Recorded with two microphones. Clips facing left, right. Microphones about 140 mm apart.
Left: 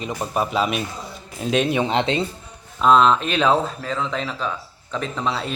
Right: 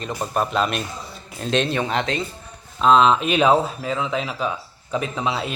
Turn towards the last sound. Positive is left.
turn(degrees=-5)  # may be behind; listen again after turning